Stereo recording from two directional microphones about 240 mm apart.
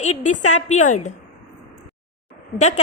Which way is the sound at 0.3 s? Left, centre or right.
Left.